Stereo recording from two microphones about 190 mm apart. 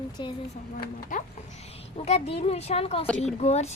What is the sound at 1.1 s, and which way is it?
A woman's voice, 45° left (ahead or behind).